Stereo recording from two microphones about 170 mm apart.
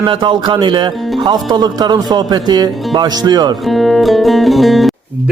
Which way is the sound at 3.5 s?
Centre (ahead or behind).